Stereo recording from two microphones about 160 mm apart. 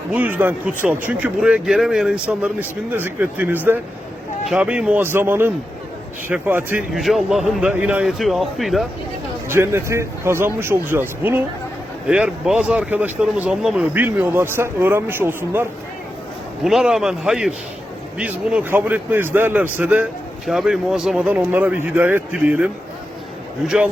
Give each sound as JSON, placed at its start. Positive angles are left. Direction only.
{"t": 0.1, "sound": "a man's voice", "side_deg": -10}
{"t": 9.5, "sound": "speech", "side_deg": -15}
{"t": 16.6, "sound": "a man's voice", "side_deg": -5}